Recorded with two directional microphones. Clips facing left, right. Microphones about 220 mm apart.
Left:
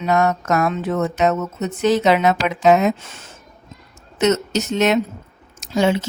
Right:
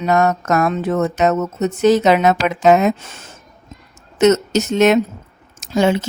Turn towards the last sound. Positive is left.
turn(degrees=-50)  # may be behind; listen again after turning